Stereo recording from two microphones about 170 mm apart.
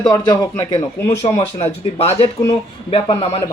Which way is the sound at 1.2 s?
35° left (ahead or behind).